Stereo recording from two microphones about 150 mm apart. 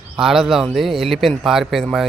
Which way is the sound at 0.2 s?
Centre (ahead or behind).